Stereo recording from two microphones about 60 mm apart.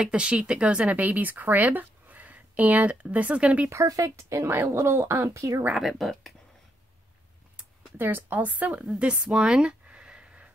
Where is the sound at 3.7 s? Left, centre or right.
Right.